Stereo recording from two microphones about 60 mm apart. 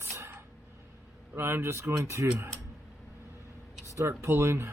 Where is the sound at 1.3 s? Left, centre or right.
Right.